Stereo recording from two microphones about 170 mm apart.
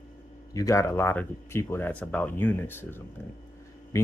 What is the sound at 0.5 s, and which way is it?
Speech, 20° left (ahead or behind).